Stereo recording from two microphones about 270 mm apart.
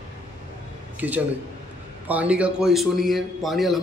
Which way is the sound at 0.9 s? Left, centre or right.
Centre.